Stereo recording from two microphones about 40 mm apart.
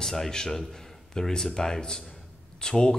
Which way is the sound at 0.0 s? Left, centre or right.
Centre.